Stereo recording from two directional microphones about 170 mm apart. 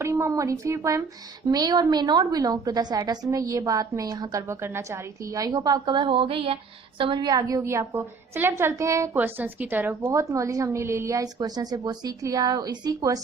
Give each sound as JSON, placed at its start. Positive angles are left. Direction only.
{"t": 0.0, "sound": "a woman's voice", "side_deg": -15}